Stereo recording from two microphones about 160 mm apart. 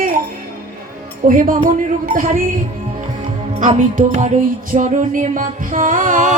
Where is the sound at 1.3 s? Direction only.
60° right (ahead or behind).